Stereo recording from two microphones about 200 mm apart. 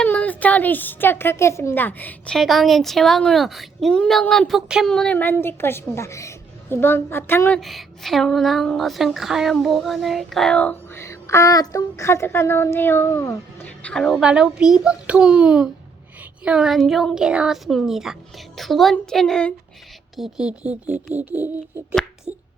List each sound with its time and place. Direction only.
0.0 s a child's voice: 5° left (ahead or behind)
7.6 s speech: centre (ahead or behind)
22.3 s finger snapping: 35° right (ahead or behind)